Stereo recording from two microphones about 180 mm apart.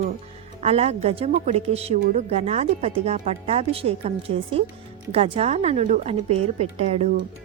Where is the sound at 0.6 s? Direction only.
35° right (ahead or behind).